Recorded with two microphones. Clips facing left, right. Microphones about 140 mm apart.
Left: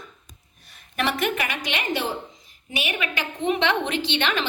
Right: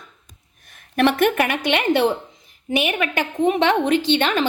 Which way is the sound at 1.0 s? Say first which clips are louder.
Right 8 dB; 55° right (ahead or behind).